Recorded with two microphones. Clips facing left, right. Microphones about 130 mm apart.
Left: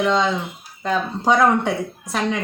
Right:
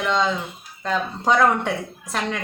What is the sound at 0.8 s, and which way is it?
Speech, 5° left (ahead or behind).